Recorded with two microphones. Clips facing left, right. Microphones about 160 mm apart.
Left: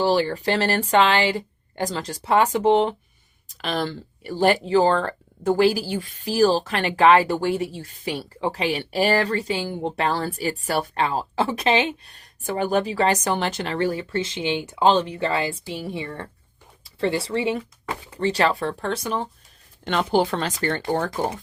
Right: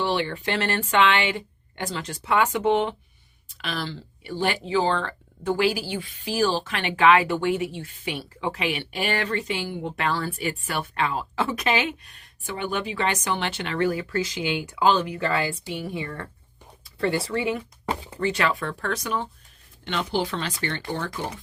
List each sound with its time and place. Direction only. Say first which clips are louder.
0.0 s a woman's voice: left 5 dB; 35° left (ahead or behind)
19.8 s speech: left 6 dB; 45° left (ahead or behind)